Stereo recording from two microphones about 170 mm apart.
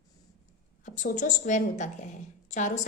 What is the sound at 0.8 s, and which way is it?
A woman's voice, 50° left (ahead or behind).